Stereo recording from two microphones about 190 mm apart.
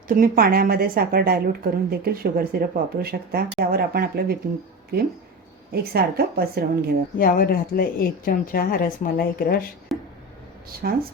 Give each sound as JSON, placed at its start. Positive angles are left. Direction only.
{"t": 0.1, "sound": "a woman's voice", "side_deg": -50}
{"t": 5.7, "sound": "a woman's voice", "side_deg": -55}
{"t": 7.2, "sound": "speech", "side_deg": 50}
{"t": 9.9, "sound": "a sound", "side_deg": 0}
{"t": 10.8, "sound": "a woman's voice", "side_deg": -50}